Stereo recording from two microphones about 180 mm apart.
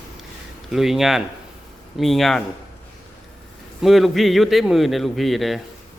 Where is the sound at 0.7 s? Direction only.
Centre (ahead or behind).